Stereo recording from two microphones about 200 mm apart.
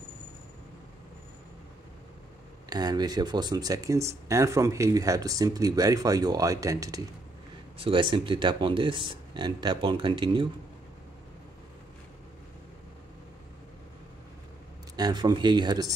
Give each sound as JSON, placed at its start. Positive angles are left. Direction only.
{"t": 2.7, "sound": "speech", "side_deg": -20}
{"t": 15.0, "sound": "speech", "side_deg": -20}